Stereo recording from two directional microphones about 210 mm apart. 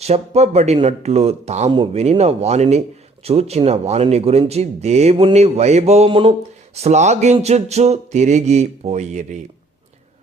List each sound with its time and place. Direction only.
0.0 s speech: 30° right (ahead or behind)